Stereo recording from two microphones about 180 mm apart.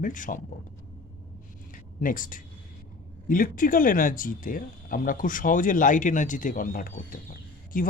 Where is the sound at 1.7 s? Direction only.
50° left (ahead or behind).